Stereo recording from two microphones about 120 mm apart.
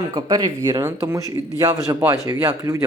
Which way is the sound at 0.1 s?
35° right (ahead or behind).